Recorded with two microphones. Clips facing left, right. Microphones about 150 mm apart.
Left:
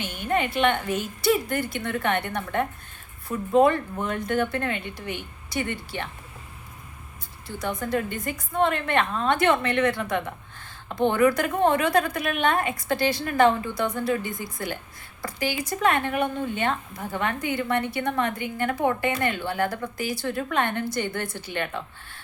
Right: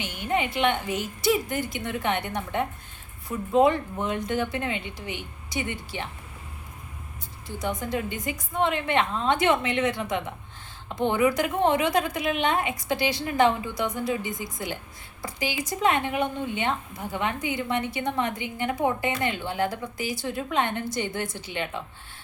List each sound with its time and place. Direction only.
0.0 s a woman's voice: 15° right (ahead or behind)
7.4 s a woman's voice: 20° right (ahead or behind)